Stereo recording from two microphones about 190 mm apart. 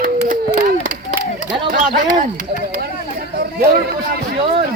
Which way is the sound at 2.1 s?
45° right (ahead or behind).